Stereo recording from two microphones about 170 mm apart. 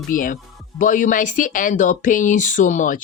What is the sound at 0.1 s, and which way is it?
Speech, 50° left (ahead or behind).